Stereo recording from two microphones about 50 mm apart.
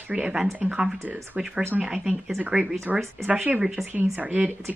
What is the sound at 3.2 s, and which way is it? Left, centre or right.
Speech, right.